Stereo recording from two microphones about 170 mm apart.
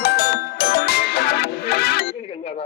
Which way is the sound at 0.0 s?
65° left (ahead or behind).